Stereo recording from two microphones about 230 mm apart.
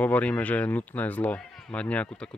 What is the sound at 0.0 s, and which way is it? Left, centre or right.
Speech, centre.